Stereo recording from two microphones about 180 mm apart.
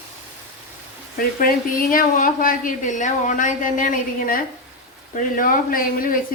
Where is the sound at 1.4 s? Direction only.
50° left (ahead or behind).